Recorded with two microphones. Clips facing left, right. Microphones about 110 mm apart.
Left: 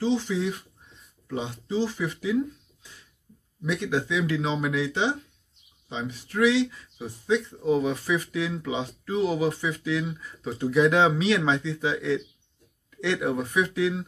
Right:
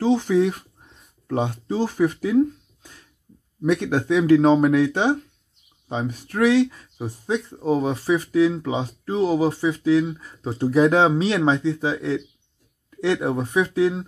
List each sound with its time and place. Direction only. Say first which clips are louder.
0.0 s speech: right 7 dB; 55° right (ahead or behind); by 14.0 s 35° right (ahead or behind)